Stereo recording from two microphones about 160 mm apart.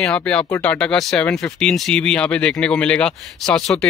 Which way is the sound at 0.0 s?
5° left (ahead or behind).